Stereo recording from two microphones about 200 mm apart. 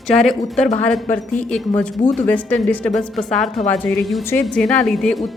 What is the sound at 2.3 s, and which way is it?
A woman's voice, 5° left (ahead or behind).